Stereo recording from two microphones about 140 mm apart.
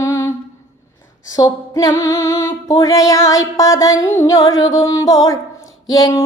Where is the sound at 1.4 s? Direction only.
25° left (ahead or behind).